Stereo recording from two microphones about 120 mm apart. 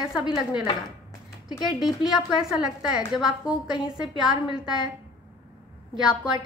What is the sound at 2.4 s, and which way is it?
Speech, 5° right (ahead or behind).